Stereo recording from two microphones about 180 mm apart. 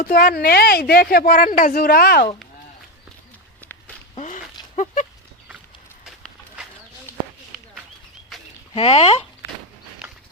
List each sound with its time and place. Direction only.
0.0 s speech: 55° left (ahead or behind)
3.6 s walk: 10° left (ahead or behind)
4.1 s walk: 40° left (ahead or behind)
8.3 s a sound: centre (ahead or behind)
8.7 s speech: 35° left (ahead or behind)
10.0 s a sound: 5° right (ahead or behind)